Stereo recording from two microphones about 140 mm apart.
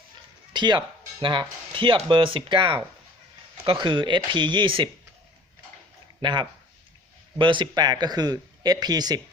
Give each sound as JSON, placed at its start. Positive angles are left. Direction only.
{"t": 0.5, "sound": "speech", "side_deg": -30}
{"t": 6.2, "sound": "speech", "side_deg": -35}